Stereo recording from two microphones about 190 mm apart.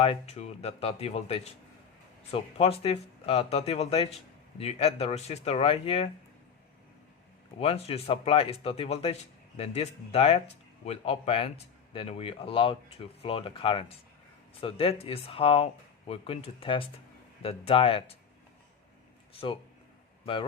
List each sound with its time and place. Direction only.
0.0 s speech: 35° left (ahead or behind)
7.6 s speech: 30° left (ahead or behind)